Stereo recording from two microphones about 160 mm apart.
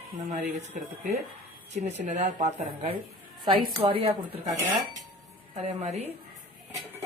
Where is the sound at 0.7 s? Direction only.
55° right (ahead or behind).